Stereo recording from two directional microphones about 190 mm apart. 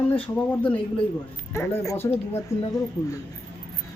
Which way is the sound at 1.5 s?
15° left (ahead or behind).